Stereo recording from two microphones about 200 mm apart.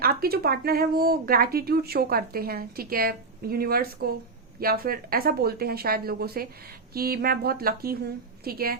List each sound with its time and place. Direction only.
0.0 s speech: 50° right (ahead or behind)